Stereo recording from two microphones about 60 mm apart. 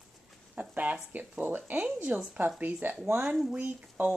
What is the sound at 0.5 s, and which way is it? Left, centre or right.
Speech, right.